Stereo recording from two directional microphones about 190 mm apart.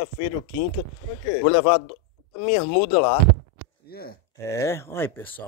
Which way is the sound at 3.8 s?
55° left (ahead or behind).